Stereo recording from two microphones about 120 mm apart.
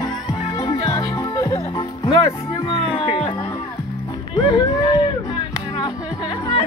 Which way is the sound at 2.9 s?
50° left (ahead or behind).